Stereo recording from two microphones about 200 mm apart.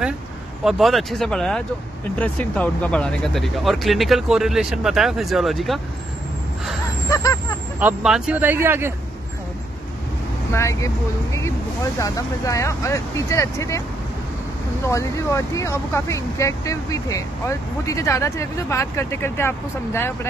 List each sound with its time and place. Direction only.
0.7 s speech: centre (ahead or behind)
7.8 s speech: 5° right (ahead or behind)
10.5 s speech: 15° left (ahead or behind)
12.0 s speech: 15° left (ahead or behind)
14.9 s speech: 15° left (ahead or behind)